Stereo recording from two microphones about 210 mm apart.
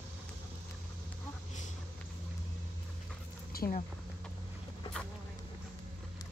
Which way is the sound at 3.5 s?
45° left (ahead or behind).